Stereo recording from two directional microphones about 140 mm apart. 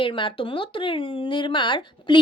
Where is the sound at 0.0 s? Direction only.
35° left (ahead or behind).